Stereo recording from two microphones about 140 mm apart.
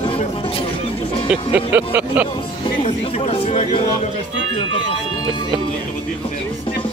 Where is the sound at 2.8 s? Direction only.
45° left (ahead or behind).